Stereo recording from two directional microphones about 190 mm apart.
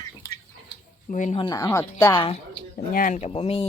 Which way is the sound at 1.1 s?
40° left (ahead or behind).